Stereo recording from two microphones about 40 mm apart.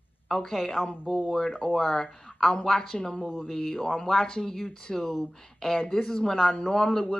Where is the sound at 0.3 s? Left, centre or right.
Centre.